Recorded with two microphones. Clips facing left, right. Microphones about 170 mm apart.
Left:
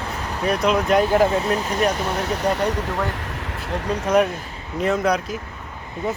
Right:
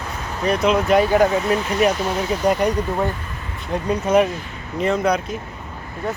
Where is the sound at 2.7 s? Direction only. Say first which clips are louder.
Right 3 dB; 85° left.